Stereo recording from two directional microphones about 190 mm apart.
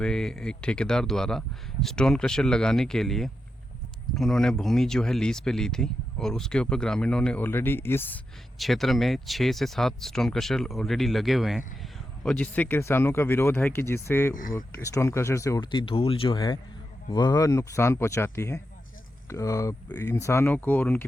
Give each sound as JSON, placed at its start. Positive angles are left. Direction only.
{"t": 0.0, "sound": "speech", "side_deg": 5}
{"t": 8.5, "sound": "speech", "side_deg": 0}